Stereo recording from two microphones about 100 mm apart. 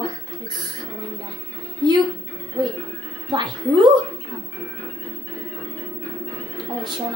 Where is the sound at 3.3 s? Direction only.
45° right (ahead or behind).